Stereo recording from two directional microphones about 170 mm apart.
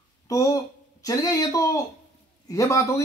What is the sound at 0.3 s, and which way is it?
Speech, 20° left (ahead or behind).